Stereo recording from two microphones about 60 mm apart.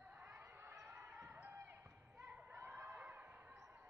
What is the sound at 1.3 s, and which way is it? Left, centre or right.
Basketball bounce, right.